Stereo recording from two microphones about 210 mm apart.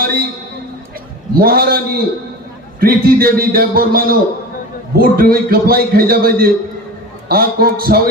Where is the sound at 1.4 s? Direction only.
45° right (ahead or behind).